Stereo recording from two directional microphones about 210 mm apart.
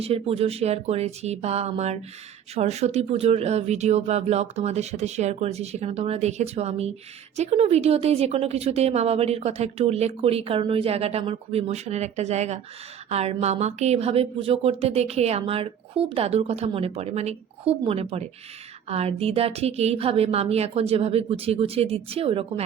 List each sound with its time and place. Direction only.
0.0 s a woman's voice: 30° right (ahead or behind)